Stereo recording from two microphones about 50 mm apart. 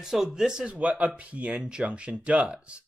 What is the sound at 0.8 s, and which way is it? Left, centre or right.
Speech, right.